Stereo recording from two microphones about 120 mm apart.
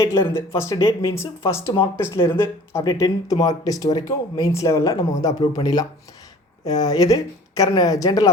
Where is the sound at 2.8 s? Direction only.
35° left (ahead or behind).